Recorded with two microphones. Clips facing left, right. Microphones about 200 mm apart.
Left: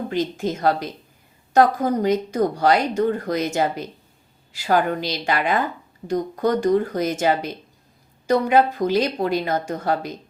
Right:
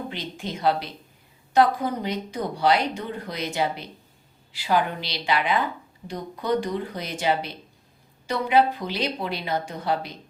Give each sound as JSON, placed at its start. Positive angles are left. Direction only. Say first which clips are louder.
{"t": 0.1, "sound": "speech", "louder": "left 10 dB", "side_deg": 45}